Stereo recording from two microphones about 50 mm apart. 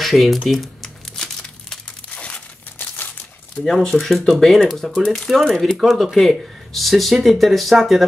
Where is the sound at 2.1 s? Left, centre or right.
Left.